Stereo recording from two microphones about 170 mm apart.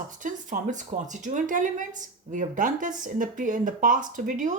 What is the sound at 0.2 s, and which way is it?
Speech, 50° right (ahead or behind).